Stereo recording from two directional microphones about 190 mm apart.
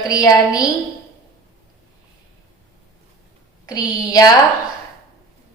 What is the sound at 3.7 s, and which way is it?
Speech, 20° left (ahead or behind).